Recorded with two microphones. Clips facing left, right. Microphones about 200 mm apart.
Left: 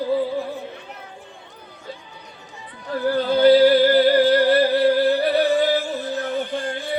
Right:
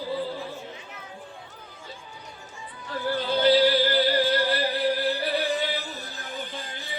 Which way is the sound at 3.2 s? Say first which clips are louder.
Left 7 dB; 50° left (ahead or behind).